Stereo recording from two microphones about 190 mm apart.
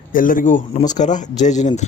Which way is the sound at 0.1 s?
45° left (ahead or behind).